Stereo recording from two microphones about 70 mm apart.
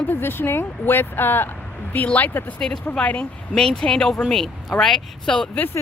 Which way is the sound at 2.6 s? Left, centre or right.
Centre.